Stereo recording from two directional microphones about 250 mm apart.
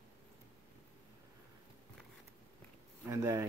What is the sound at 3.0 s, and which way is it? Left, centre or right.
Speech, centre.